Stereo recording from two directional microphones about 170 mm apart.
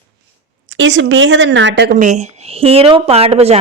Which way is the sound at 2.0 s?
45° right (ahead or behind).